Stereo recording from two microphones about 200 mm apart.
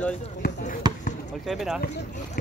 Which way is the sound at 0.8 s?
20° right (ahead or behind).